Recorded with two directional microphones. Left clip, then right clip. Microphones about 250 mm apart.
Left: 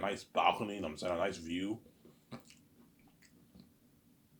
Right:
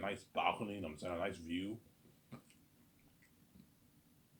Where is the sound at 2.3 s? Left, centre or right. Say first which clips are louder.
Left 6 dB; left.